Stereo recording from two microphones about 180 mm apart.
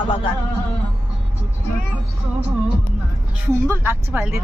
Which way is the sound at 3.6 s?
10° right (ahead or behind).